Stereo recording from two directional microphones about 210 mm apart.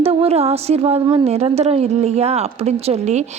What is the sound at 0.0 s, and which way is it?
A woman's voice, 30° right (ahead or behind).